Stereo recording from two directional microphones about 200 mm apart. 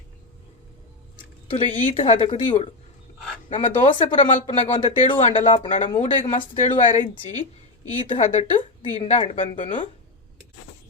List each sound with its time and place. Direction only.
1.5 s speech: 30° left (ahead or behind)